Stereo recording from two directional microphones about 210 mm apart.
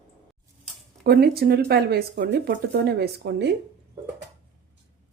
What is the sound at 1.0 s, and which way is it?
Speech, 50° right (ahead or behind).